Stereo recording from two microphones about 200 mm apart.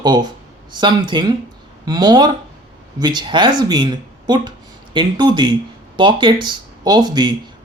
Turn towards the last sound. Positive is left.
turn(degrees=-20)  # may be behind; listen again after turning